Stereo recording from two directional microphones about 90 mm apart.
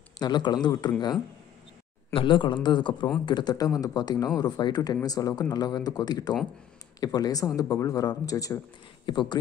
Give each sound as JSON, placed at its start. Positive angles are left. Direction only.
{"t": 0.2, "sound": "speech", "side_deg": 55}
{"t": 2.1, "sound": "a man's voice", "side_deg": 65}
{"t": 9.0, "sound": "a man's voice", "side_deg": 55}